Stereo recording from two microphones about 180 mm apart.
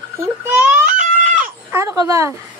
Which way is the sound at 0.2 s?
10° right (ahead or behind).